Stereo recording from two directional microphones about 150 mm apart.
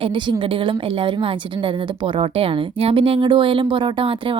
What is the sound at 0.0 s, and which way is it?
A woman's voice, 35° right (ahead or behind).